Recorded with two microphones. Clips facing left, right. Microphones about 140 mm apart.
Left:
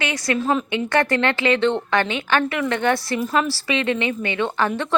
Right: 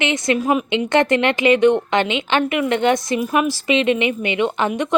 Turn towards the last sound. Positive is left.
turn(degrees=-15)  # may be behind; listen again after turning